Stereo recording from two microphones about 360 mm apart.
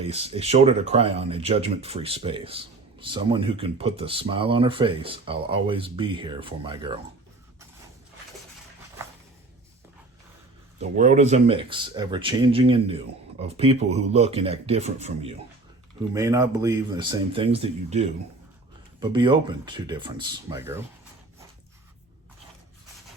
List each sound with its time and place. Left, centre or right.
0.0 s speech: centre
10.8 s speech: right